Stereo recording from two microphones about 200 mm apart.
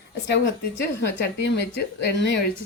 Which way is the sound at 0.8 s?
55° left (ahead or behind).